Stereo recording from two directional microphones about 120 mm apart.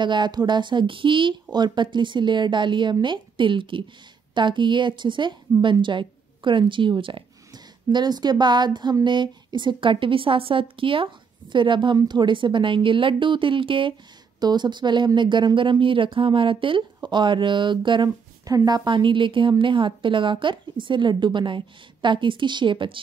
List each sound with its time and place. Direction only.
0.0 s a woman's voice: 40° right (ahead or behind)
18.9 s a woman's voice: 45° right (ahead or behind)